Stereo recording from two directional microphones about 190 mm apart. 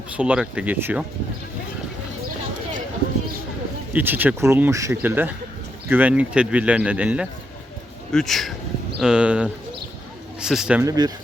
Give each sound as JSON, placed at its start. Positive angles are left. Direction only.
{"t": 0.2, "sound": "speech", "side_deg": -5}
{"t": 3.9, "sound": "speech", "side_deg": -10}
{"t": 10.8, "sound": "speech", "side_deg": -20}